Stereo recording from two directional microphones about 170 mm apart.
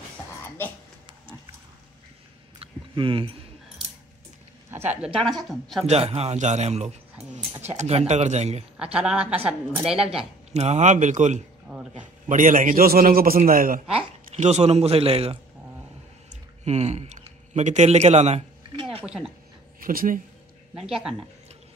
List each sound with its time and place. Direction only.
2.6 s a sound: 30° right (ahead or behind)
5.4 s a woman's voice: centre (ahead or behind)
5.9 s a man's voice: 35° right (ahead or behind)
8.7 s a woman's voice: 5° right (ahead or behind)
10.5 s a man's voice: 40° right (ahead or behind)
11.7 s a sound: 5° left (ahead or behind)
12.3 s a man's voice: 50° right (ahead or behind)
14.3 s a man's voice: 40° right (ahead or behind)
16.6 s a man's voice: 40° right (ahead or behind)
19.0 s a woman's voice: 5° right (ahead or behind)
19.8 s speech: 55° right (ahead or behind)
20.8 s a woman's voice: 5° right (ahead or behind)